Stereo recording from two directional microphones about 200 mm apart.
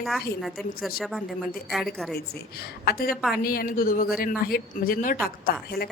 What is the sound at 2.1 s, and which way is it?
Speech, 50° left (ahead or behind).